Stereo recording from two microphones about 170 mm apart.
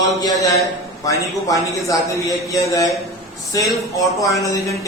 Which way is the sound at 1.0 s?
20° left (ahead or behind).